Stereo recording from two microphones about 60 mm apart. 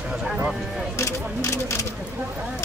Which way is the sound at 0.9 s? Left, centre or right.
Left.